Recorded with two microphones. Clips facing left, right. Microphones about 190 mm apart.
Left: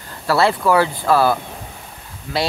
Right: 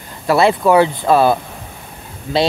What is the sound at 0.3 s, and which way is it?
Speech, 20° right (ahead or behind).